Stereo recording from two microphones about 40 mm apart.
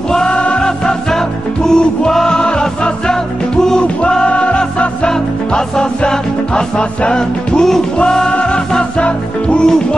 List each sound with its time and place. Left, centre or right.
0.3 s music: left
1.7 s music: centre
4.3 s music: left